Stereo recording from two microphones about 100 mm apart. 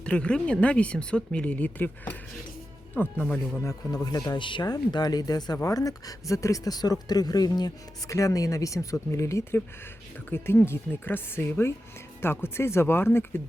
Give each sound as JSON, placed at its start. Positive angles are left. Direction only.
{"t": 0.0, "sound": "speech", "side_deg": 10}
{"t": 3.6, "sound": "speech", "side_deg": 35}